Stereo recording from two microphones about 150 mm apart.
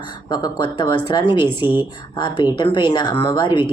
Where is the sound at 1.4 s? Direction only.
10° right (ahead or behind).